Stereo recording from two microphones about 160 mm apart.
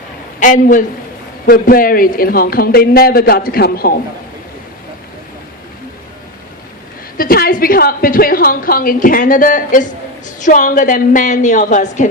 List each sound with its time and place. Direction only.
0.3 s a woman's voice: 55° left (ahead or behind)
7.2 s a woman's voice: 65° left (ahead or behind); by 12.0 s 50° left (ahead or behind)